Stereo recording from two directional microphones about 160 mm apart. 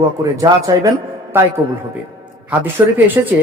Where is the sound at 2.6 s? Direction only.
10° right (ahead or behind).